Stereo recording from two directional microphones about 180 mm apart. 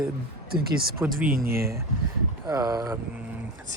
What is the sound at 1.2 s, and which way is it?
Speech, 55° right (ahead or behind).